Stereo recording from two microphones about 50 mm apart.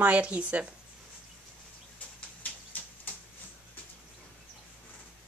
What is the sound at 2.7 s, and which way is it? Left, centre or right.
Tick-tock, left.